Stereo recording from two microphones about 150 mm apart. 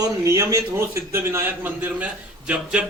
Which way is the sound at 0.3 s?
20° right (ahead or behind).